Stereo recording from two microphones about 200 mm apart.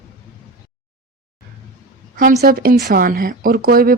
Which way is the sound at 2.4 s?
45° right (ahead or behind).